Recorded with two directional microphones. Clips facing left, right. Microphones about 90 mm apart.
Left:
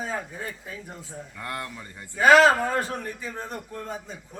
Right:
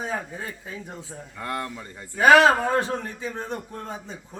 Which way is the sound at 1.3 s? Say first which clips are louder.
Right 4 dB; 25° right (ahead or behind).